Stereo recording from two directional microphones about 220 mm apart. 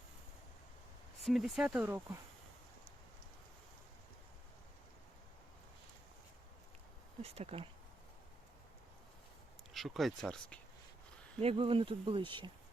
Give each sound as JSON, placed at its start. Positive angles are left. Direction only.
{"t": 1.2, "sound": "speech", "side_deg": 0}
{"t": 7.2, "sound": "speech", "side_deg": -25}
{"t": 9.7, "sound": "speech", "side_deg": 0}
{"t": 11.3, "sound": "speech", "side_deg": -25}